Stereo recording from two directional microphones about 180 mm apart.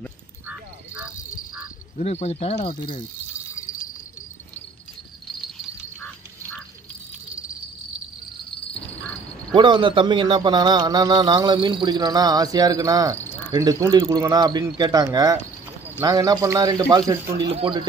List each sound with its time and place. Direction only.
0.5 s frog: 10° right (ahead or behind)
2.0 s speech: 40° left (ahead or behind)
8.7 s quack: 5° left (ahead or behind)
9.6 s a man's voice: 25° right (ahead or behind)